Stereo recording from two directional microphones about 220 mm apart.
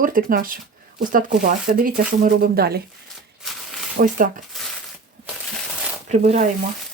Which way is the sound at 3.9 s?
35° right (ahead or behind).